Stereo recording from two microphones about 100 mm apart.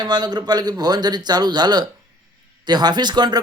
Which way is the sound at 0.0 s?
45° right (ahead or behind).